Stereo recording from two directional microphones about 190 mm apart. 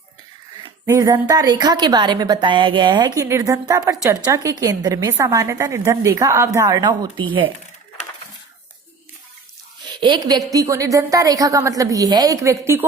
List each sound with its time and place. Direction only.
0.6 s a woman's voice: 15° right (ahead or behind)
9.9 s a woman's voice: 25° right (ahead or behind)